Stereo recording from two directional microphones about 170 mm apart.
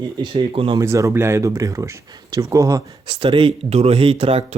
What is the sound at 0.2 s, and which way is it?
Speech, 30° right (ahead or behind).